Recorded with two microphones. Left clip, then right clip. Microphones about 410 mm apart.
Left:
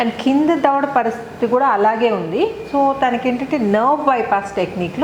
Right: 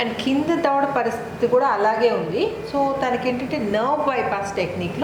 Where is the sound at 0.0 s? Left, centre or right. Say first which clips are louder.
Left 6 dB; left.